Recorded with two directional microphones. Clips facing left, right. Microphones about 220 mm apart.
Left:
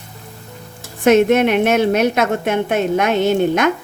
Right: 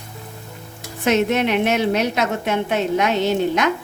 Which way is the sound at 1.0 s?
50° left (ahead or behind).